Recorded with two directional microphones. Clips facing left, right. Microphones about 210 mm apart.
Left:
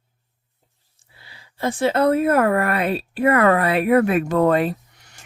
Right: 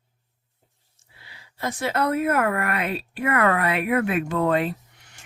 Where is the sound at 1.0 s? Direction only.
30° left (ahead or behind).